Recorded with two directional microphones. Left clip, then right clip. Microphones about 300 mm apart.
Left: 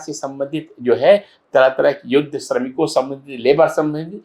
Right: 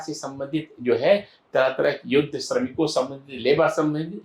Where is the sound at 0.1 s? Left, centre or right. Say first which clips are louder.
Left 7 dB; centre.